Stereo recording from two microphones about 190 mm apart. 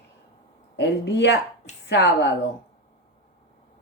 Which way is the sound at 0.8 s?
65° left (ahead or behind).